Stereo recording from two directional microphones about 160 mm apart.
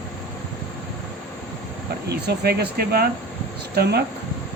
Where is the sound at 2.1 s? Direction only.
80° right.